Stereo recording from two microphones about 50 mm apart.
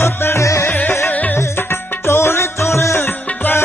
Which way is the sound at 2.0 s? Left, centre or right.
Left.